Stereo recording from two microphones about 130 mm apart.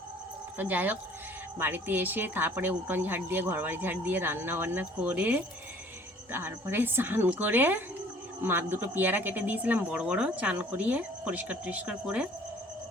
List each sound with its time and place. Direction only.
0.5 s speech: 15° right (ahead or behind)